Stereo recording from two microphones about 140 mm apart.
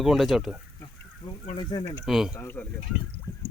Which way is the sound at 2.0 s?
Centre (ahead or behind).